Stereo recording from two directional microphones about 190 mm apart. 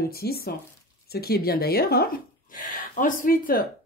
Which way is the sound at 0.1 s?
55° left (ahead or behind).